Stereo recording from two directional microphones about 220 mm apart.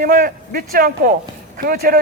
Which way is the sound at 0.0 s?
40° right (ahead or behind).